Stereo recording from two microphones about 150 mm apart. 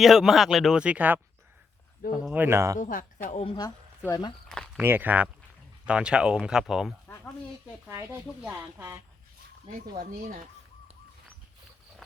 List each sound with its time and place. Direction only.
0.0 s speech: centre (ahead or behind)
2.3 s speech: 15° right (ahead or behind)
2.7 s speech: 60° left (ahead or behind)
3.4 s speech: 30° left (ahead or behind)
4.4 s a sound: 5° left (ahead or behind)
4.8 s speech: 15° right (ahead or behind)
7.9 s speech: 15° right (ahead or behind)
10.0 s speech: 65° right (ahead or behind)